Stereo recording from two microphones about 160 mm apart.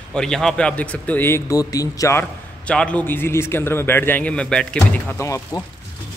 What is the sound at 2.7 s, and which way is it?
A man's voice, 5° left (ahead or behind).